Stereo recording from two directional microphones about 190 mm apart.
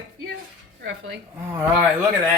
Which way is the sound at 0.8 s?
75° right (ahead or behind).